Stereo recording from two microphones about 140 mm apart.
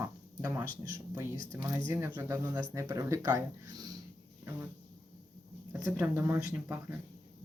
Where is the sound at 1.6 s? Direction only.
10° right (ahead or behind).